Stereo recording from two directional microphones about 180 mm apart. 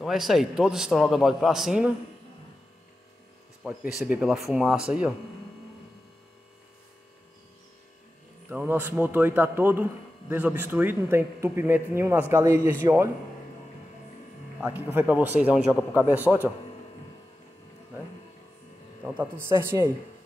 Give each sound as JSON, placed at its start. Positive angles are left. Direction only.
{"t": 0.0, "sound": "a man's voice", "side_deg": 0}
{"t": 3.6, "sound": "a man's voice", "side_deg": -5}
{"t": 8.5, "sound": "speech", "side_deg": -10}
{"t": 14.6, "sound": "speech", "side_deg": -10}
{"t": 19.0, "sound": "speech", "side_deg": -10}